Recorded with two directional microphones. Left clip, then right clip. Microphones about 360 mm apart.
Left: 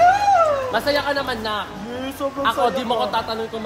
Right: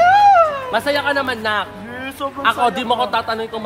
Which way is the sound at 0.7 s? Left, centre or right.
Right.